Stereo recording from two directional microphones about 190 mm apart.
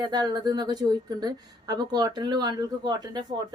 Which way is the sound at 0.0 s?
20° right (ahead or behind).